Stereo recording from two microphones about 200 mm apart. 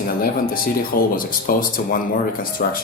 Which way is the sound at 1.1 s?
45° left (ahead or behind).